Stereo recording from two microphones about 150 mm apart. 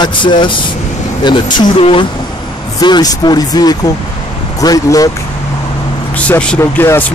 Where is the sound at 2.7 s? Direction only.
25° left (ahead or behind).